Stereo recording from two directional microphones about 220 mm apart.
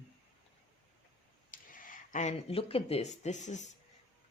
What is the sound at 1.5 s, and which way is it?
Speech, 35° left (ahead or behind).